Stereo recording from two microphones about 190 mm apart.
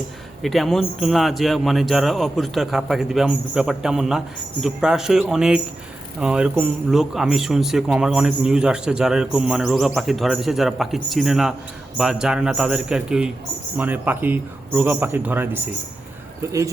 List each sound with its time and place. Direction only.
0.4 s speech: centre (ahead or behind); by 16.6 s 15° right (ahead or behind)